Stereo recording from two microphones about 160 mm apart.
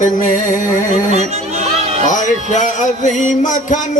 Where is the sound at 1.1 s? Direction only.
40° right (ahead or behind).